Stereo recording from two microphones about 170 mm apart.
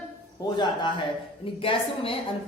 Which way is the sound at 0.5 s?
25° left (ahead or behind).